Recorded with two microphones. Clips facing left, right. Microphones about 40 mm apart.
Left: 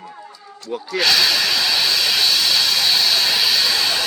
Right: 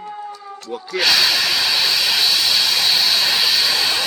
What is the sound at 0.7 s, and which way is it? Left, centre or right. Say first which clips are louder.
Hiss: even; centre.